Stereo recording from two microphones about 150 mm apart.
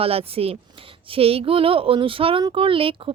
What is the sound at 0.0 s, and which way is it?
Speech, 40° right (ahead or behind).